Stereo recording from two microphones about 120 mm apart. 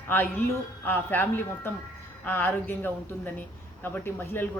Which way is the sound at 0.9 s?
15° left (ahead or behind).